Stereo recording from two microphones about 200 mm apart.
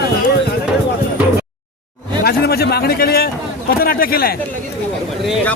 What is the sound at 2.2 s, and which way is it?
A man's voice, 50° left (ahead or behind).